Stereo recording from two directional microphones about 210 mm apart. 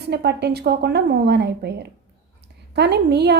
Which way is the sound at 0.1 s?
50° right (ahead or behind).